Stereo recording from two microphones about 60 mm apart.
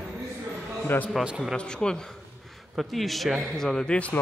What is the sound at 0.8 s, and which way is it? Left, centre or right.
Speech, left.